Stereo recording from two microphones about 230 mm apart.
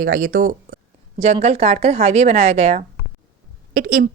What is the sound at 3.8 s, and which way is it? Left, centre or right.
Speech, right.